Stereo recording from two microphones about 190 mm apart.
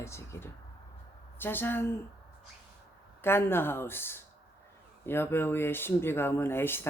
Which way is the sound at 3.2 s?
10° left (ahead or behind).